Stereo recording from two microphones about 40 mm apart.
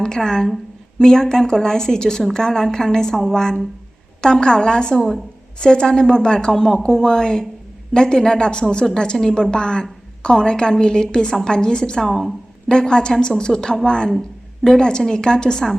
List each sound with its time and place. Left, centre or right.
0.0 s a woman's voice: centre
12.0 s speech: centre
12.6 s a woman's voice: centre